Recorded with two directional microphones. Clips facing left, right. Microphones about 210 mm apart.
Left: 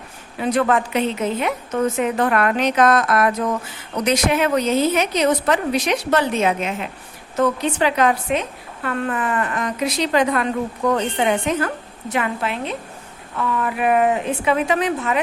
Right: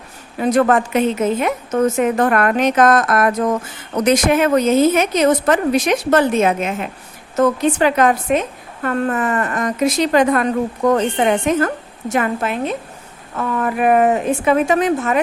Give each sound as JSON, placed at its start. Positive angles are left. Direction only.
{"t": 0.3, "sound": "a woman's voice", "side_deg": -45}